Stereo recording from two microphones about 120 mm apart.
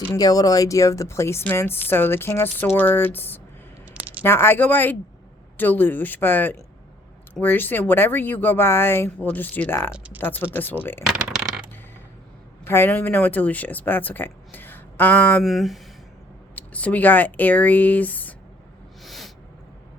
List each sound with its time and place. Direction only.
0.1 s speech: 30° left (ahead or behind)
9.9 s speech: 10° right (ahead or behind)
10.2 s speech: 15° left (ahead or behind)
11.0 s coin: centre (ahead or behind)
12.6 s speech: 20° left (ahead or behind)
15.4 s speech: centre (ahead or behind)
16.6 s speech: 15° left (ahead or behind)
19.0 s a sound: centre (ahead or behind)